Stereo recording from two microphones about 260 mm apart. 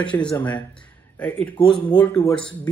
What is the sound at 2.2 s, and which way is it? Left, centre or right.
Speech, centre.